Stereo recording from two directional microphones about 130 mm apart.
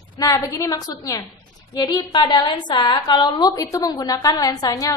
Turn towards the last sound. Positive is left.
turn(degrees=30)  # may be behind; listen again after turning